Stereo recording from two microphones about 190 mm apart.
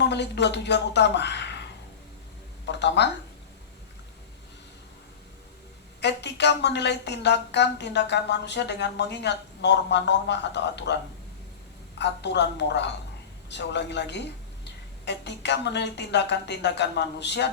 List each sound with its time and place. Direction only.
0.0 s a woman's voice: 65° left (ahead or behind)
2.6 s speech: 65° left (ahead or behind)
6.0 s a woman's voice: 65° left (ahead or behind)
11.9 s a woman's voice: 65° left (ahead or behind)